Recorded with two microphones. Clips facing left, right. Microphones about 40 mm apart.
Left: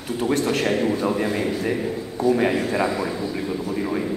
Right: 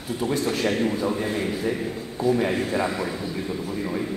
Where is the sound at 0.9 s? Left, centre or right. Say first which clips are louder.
Left 3 dB; left.